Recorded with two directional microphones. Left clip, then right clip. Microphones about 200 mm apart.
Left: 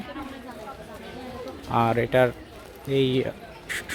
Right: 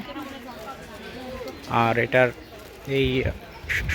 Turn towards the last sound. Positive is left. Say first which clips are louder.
# right 5 dB
turn(degrees=15)  # may be behind; listen again after turning